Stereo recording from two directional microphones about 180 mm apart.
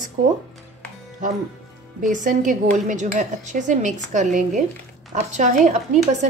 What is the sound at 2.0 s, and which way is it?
Speech, 45° right (ahead or behind).